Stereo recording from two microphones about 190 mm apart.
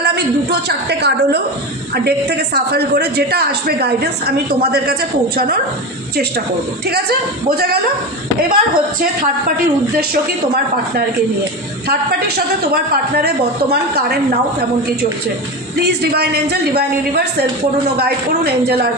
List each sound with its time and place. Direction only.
0.0 s a woman's voice: 60° right (ahead or behind)
6.8 s a woman's voice: 55° right (ahead or behind)
12.7 s a woman's voice: 55° right (ahead or behind)
15.8 s a woman's voice: 60° right (ahead or behind)